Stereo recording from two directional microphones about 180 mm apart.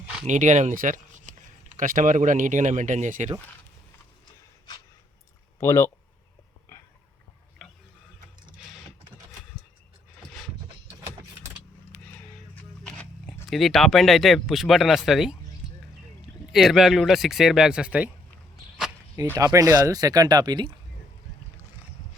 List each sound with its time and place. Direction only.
0.3 s speech: 45° right (ahead or behind)
5.5 s speech: 15° left (ahead or behind)
12.8 s speech: 5° left (ahead or behind)
16.5 s speech: centre (ahead or behind)
19.2 s speech: 20° right (ahead or behind)